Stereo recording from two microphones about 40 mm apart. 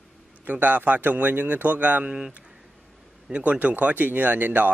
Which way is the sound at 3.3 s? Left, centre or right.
Right.